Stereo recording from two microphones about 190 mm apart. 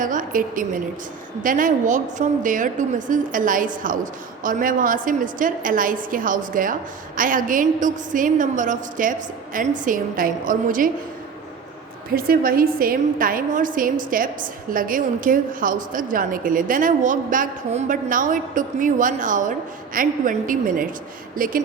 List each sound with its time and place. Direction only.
0.0 s a woman's voice: 45° right (ahead or behind)
12.1 s a woman's voice: 50° right (ahead or behind)